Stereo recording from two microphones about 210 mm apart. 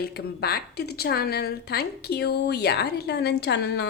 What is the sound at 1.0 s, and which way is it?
A woman's voice, 50° left (ahead or behind).